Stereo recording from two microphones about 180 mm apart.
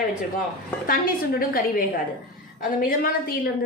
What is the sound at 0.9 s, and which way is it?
A woman's voice, 55° left (ahead or behind).